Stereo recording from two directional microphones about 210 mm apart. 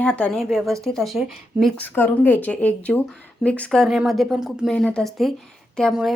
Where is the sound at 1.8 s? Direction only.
10° left (ahead or behind).